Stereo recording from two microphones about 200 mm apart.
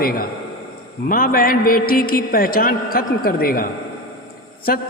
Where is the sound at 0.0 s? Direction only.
45° left (ahead or behind).